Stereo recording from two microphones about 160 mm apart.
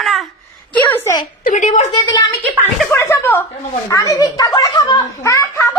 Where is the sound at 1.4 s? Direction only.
55° left (ahead or behind).